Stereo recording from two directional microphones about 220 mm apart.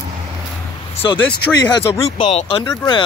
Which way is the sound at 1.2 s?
10° left (ahead or behind).